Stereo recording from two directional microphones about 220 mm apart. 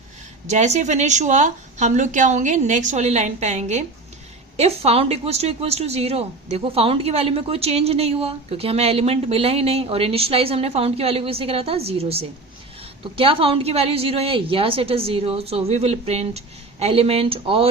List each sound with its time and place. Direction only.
0.4 s a woman's voice: 30° right (ahead or behind)